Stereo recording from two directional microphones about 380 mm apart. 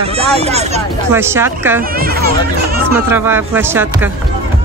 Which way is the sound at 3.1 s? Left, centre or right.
Centre.